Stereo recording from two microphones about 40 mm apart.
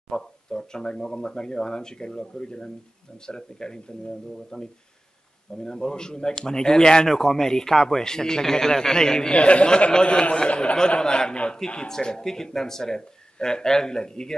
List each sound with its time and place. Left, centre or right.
0.1 s a man's voice: centre
9.3 s a man's voice: left